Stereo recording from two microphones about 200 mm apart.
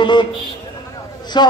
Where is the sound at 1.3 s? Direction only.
25° left (ahead or behind).